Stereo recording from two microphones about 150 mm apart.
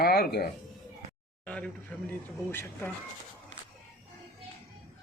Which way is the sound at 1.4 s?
10° left (ahead or behind).